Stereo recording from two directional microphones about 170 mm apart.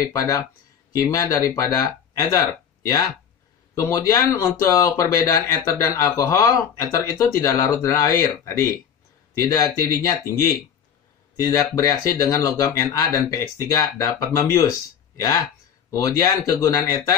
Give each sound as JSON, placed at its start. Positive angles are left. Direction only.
{"t": 0.0, "sound": "speech", "side_deg": 20}
{"t": 3.7, "sound": "speech", "side_deg": 20}
{"t": 11.5, "sound": "speech", "side_deg": 20}